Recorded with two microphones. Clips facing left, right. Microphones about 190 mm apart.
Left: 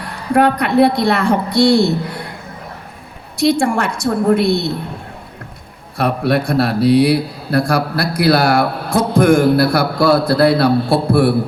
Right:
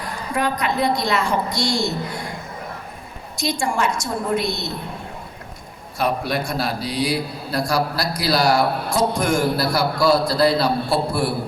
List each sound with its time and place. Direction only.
0.0 s a man's voice: 60° left (ahead or behind)
3.3 s a man's voice: 60° left (ahead or behind)
6.0 s a man's voice: 60° left (ahead or behind)